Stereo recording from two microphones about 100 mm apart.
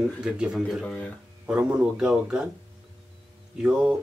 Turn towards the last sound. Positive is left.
turn(degrees=-5)  # may be behind; listen again after turning